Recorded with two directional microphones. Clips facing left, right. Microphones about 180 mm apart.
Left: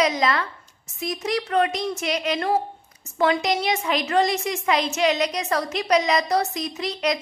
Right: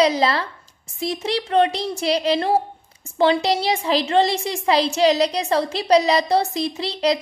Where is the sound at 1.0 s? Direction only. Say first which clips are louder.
Right 2 dB; 30° right (ahead or behind).